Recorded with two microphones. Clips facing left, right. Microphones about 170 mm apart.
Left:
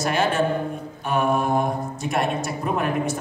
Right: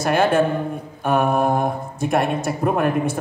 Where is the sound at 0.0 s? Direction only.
55° right (ahead or behind).